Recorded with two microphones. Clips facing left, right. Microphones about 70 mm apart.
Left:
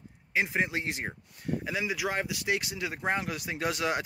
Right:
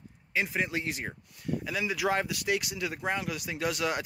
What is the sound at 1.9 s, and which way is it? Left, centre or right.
Speech, centre.